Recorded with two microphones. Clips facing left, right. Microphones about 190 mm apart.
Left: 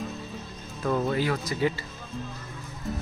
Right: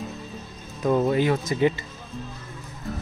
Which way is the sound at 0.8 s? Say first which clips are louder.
Right 5 dB; 20° right (ahead or behind).